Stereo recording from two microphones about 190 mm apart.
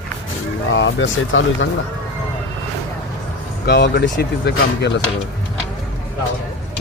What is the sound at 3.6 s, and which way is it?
Speech, 60° left (ahead or behind).